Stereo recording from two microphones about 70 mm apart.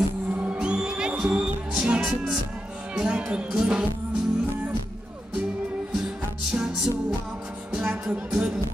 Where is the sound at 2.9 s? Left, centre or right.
Centre.